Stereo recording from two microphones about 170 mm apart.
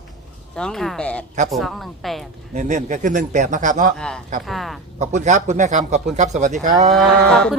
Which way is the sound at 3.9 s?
5° left (ahead or behind).